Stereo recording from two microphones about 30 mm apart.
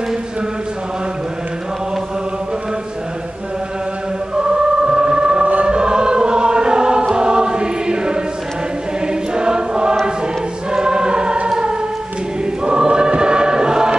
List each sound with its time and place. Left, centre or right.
4.4 s choir: right
5.4 s choir: right
5.7 s choir: right
11.4 s music: right
12.6 s choir: right